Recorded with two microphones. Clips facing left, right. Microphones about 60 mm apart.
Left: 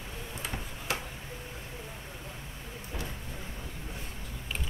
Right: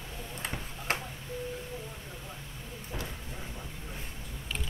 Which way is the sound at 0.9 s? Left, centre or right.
Right.